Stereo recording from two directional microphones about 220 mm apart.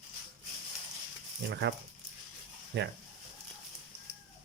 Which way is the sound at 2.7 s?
50° right (ahead or behind).